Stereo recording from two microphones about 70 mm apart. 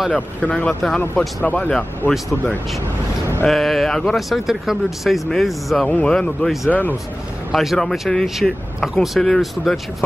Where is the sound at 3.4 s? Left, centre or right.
Centre.